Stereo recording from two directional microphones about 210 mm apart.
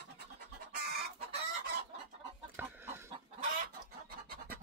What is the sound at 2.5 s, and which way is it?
Chicken, 10° right (ahead or behind).